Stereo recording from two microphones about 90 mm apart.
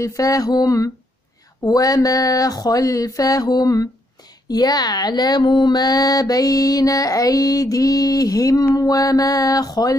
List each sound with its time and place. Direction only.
0.0 s speech: 35° left (ahead or behind)